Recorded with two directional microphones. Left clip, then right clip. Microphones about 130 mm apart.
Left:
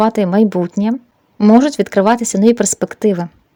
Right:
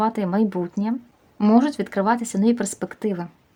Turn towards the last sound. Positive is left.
turn(degrees=55)  # may be behind; listen again after turning